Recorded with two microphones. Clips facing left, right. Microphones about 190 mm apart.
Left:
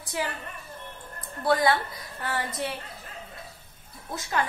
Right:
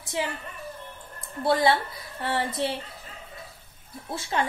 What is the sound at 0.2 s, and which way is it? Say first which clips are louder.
Speech: right 1 dB; 25° right (ahead or behind).